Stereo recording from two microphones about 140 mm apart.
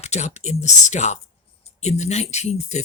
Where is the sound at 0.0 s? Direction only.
55° left (ahead or behind).